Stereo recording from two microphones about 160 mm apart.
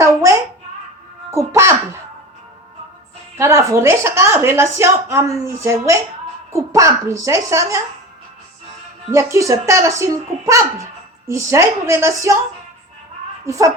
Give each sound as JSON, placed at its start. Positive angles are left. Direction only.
{"t": 0.0, "sound": "a sound", "side_deg": -20}
{"t": 1.3, "sound": "a woman's voice", "side_deg": -15}
{"t": 3.3, "sound": "a woman's voice", "side_deg": -20}
{"t": 9.1, "sound": "a woman's voice", "side_deg": -20}
{"t": 13.4, "sound": "speech", "side_deg": -20}